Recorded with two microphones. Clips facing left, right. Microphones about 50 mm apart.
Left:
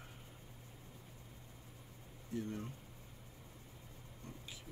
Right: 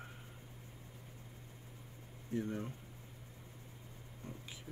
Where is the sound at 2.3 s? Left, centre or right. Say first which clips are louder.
Right 3 dB; right.